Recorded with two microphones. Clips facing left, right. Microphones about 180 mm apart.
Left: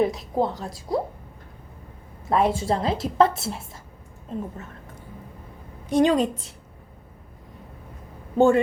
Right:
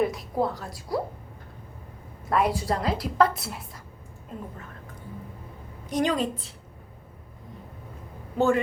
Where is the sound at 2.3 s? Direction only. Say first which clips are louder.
Left 3 dB; 25° left (ahead or behind).